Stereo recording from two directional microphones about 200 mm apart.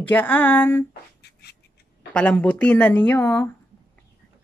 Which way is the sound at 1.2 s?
55° left (ahead or behind).